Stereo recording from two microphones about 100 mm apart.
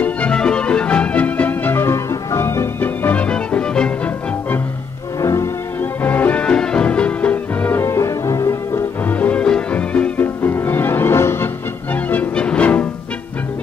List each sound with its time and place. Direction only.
0.0 s music: 10° left (ahead or behind)
5.2 s music: 30° left (ahead or behind)
9.0 s music: 15° left (ahead or behind)